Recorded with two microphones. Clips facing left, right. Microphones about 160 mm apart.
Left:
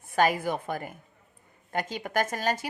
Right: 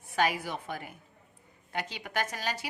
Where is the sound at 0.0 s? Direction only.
50° left (ahead or behind).